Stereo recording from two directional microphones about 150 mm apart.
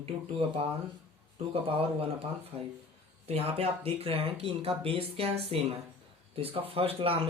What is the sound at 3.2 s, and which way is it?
Speech, 40° right (ahead or behind).